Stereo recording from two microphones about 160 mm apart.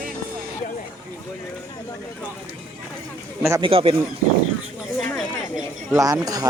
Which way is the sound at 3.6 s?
35° right (ahead or behind).